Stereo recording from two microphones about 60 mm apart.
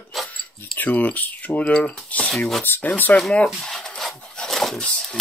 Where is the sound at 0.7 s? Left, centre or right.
Left.